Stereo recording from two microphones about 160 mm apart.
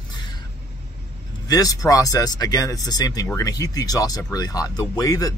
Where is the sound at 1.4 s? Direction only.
20° left (ahead or behind).